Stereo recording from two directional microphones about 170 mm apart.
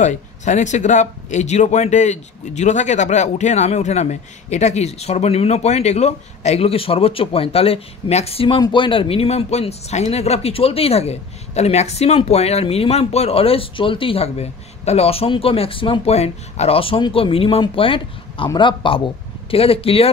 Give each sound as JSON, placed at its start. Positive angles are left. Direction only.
{"t": 0.0, "sound": "speech", "side_deg": 45}